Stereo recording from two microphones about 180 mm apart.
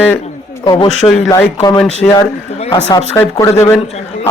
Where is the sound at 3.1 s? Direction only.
15° left (ahead or behind).